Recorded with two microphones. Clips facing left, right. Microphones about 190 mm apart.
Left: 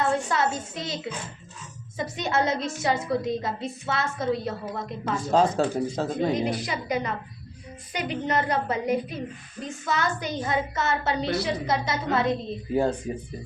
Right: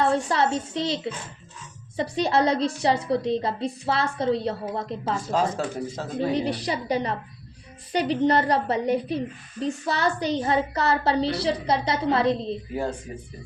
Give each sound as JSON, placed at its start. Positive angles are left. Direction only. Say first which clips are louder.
{"t": 0.0, "sound": "a woman's voice", "louder": "right 2 dB", "side_deg": -35}
{"t": 2.0, "sound": "a woman's voice", "louder": "right 4 dB", "side_deg": -35}
{"t": 5.5, "sound": "speech", "louder": "left 4 dB", "side_deg": 30}
{"t": 6.1, "sound": "a woman's voice", "louder": "right 3 dB", "side_deg": -35}